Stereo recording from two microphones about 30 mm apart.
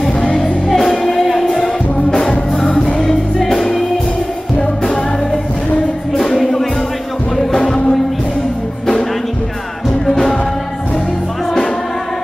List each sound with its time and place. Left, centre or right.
0.7 s music: centre
0.9 s music: centre
1.2 s music: centre
2.0 s music: centre
3.3 s music: centre
6.1 s music: centre
10.0 s music: centre